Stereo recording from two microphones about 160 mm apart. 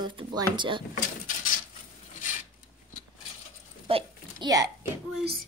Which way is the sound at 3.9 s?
25° right (ahead or behind).